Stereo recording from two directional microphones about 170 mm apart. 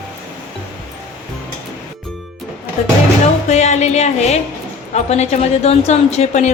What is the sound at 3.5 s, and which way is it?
A woman's voice, 40° left (ahead or behind).